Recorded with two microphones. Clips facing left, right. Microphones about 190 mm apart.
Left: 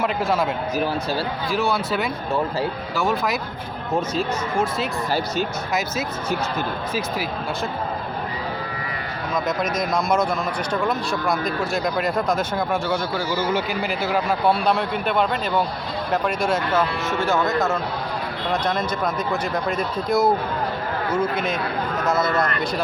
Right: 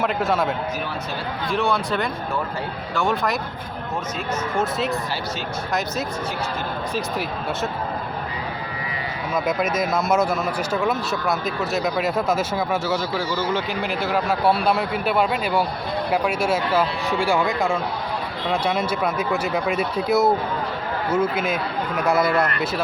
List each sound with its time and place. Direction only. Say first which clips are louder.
0.0 s speech: even; centre (ahead or behind)
1.5 s speech: right 2 dB; centre (ahead or behind)
4.5 s speech: even; centre (ahead or behind)
9.3 s speech: right 1 dB; 5° right (ahead or behind)